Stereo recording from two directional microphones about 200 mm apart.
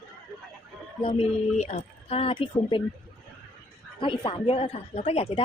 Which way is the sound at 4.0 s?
25° left (ahead or behind).